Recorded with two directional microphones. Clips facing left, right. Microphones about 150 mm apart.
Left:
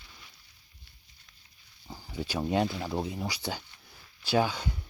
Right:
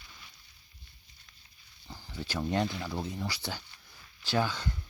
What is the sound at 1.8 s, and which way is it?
Speech, 15° left (ahead or behind).